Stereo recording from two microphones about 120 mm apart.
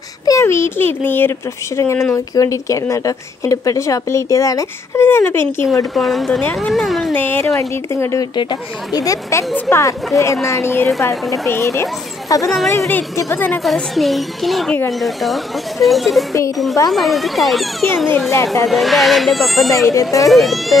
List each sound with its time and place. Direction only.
0.2 s a child's voice: 25° left (ahead or behind)
5.9 s speech: centre (ahead or behind)
7.2 s a woman's voice: 15° left (ahead or behind)
8.4 s a woman's voice: 35° left (ahead or behind); by 13.6 s 15° left (ahead or behind)
13.7 s speech: centre (ahead or behind)
19.9 s a woman's voice: 25° left (ahead or behind)
20.2 s speech: centre (ahead or behind)